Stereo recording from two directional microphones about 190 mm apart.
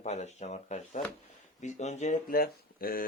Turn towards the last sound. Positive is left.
turn(degrees=50)  # may be behind; listen again after turning